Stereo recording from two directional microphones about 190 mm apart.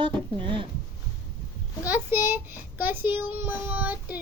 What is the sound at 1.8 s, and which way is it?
Speech, 10° right (ahead or behind).